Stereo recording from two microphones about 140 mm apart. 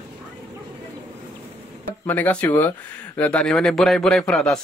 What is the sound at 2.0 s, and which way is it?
Speech, 10° left (ahead or behind).